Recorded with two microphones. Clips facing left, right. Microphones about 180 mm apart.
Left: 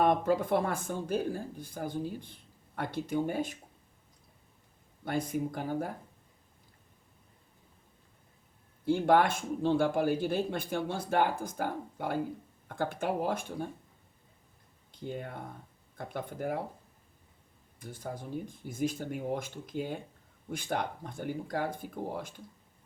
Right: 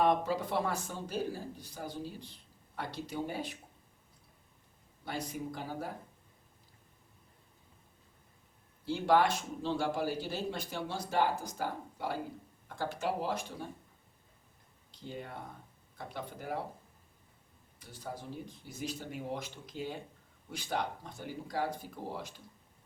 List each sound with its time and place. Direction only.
0.0 s speech: 50° left (ahead or behind)
5.0 s speech: 50° left (ahead or behind)
8.8 s speech: 50° left (ahead or behind)
15.0 s speech: 50° left (ahead or behind)
17.7 s speech: 50° left (ahead or behind)